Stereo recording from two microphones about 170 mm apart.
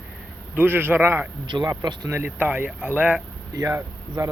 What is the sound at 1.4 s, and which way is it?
Speech, 25° right (ahead or behind).